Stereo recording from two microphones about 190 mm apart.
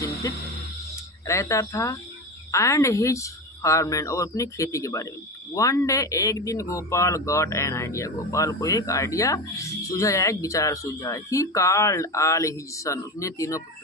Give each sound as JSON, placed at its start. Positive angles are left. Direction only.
{"t": 0.0, "sound": "music", "side_deg": 15}
{"t": 1.3, "sound": "speech", "side_deg": 15}